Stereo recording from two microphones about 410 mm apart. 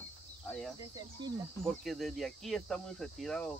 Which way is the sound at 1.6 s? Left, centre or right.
Centre.